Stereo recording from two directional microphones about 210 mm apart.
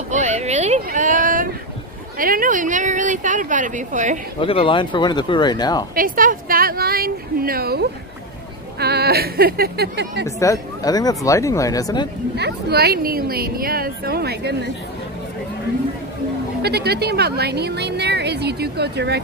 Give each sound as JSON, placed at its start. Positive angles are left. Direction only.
{"t": 0.1, "sound": "a sound", "side_deg": -35}
{"t": 2.1, "sound": "speech", "side_deg": -40}
{"t": 4.4, "sound": "speech", "side_deg": 25}
{"t": 5.9, "sound": "speech", "side_deg": -40}
{"t": 10.2, "sound": "speech", "side_deg": 15}
{"t": 12.4, "sound": "speech", "side_deg": -50}
{"t": 16.6, "sound": "speech", "side_deg": -50}